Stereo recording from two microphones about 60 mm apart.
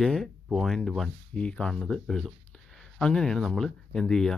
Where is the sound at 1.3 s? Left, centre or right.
Centre.